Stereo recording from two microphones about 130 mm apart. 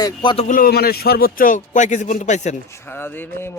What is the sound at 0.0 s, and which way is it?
Speech, 35° left (ahead or behind).